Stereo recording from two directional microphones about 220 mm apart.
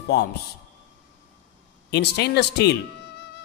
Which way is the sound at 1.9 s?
50° left (ahead or behind).